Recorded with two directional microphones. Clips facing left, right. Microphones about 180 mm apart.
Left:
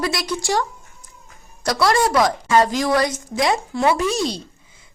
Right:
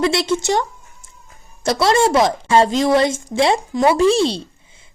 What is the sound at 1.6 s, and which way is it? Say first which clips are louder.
Speech: right 3 dB; 25° right (ahead or behind).